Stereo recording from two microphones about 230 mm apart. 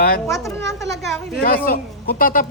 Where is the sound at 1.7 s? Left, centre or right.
Left.